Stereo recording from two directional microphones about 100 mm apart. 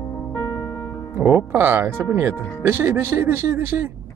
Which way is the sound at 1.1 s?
25° right (ahead or behind).